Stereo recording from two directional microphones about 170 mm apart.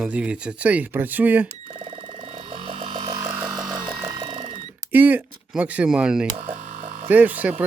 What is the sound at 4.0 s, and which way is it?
Alarm clock, 25° right (ahead or behind).